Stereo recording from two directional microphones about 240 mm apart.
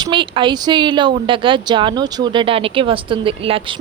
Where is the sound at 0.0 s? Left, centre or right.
Centre.